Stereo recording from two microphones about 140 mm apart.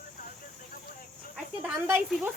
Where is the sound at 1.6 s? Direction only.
15° right (ahead or behind).